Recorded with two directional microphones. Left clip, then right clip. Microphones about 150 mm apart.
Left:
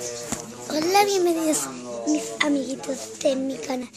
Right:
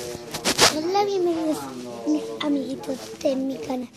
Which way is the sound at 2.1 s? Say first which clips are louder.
Left 1 dB; 35° left (ahead or behind).